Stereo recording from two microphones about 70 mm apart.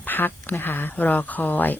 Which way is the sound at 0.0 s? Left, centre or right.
Left.